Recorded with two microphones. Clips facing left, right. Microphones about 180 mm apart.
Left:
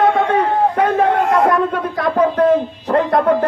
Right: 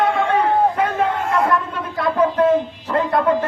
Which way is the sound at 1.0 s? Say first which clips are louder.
Left 6 dB; 60° left (ahead or behind).